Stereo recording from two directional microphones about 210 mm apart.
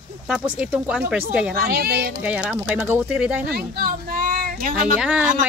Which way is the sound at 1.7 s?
50° right (ahead or behind).